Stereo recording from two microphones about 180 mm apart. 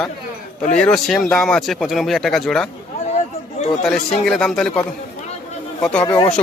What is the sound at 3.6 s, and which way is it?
Chatter, 40° left (ahead or behind).